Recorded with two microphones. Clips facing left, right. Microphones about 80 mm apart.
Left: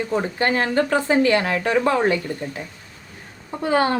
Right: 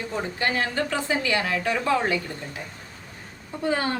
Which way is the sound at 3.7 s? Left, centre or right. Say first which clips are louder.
Left 11 dB; left.